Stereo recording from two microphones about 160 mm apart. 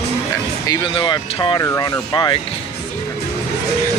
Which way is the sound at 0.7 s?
25° left (ahead or behind).